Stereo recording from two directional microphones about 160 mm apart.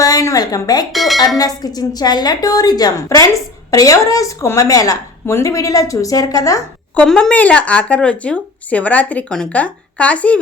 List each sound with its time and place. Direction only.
0.0 s a sound: 20° left (ahead or behind)
0.9 s speech: centre (ahead or behind)
1.4 s a woman's voice: 25° left (ahead or behind)
6.9 s speech: 5° left (ahead or behind)